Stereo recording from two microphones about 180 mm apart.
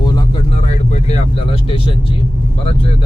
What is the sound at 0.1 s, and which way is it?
Vehicle, 30° left (ahead or behind).